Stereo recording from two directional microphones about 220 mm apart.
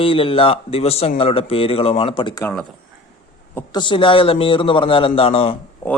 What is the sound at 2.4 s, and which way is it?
A man's voice, 10° left (ahead or behind).